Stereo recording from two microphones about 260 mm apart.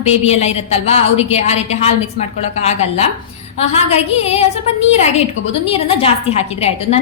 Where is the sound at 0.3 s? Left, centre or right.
Left.